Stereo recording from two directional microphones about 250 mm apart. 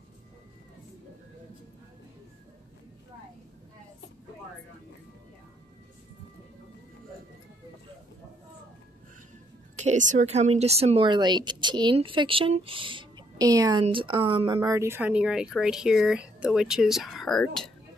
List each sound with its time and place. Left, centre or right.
9.8 s speech: right; by 17.6 s centre